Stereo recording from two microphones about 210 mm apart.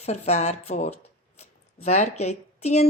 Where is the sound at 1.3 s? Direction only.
30° left (ahead or behind).